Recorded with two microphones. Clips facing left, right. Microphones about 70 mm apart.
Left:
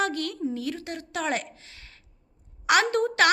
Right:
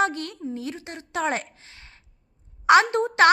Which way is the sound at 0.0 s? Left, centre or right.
Right.